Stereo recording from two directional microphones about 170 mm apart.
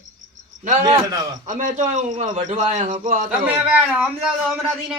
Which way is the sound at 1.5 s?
50° right (ahead or behind).